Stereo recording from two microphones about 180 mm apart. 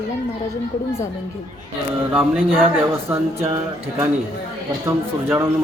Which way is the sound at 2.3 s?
Centre (ahead or behind).